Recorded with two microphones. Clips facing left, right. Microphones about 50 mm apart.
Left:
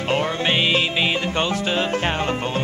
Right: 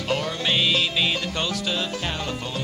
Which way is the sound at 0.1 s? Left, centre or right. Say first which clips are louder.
Left 3 dB; left.